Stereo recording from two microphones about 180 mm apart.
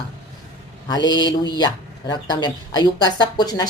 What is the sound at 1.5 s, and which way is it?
A woman's voice, 25° left (ahead or behind).